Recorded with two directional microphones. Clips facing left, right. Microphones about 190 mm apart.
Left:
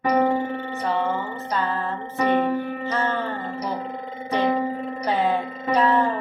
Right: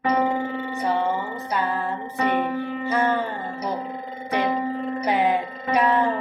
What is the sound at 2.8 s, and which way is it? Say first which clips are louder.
Music: right 3 dB; 10° right (ahead or behind).